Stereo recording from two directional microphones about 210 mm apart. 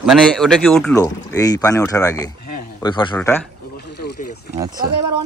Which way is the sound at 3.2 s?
10° left (ahead or behind).